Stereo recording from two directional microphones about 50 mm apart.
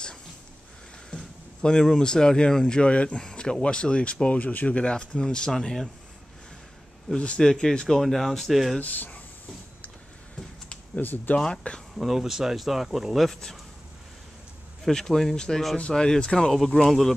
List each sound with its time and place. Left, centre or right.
1.1 s speech: centre
7.2 s speech: centre
8.0 s speech: centre
8.7 s speech: left
11.0 s speech: left
11.3 s speech: centre
12.0 s speech: centre
14.9 s speech: centre
16.5 s speech: centre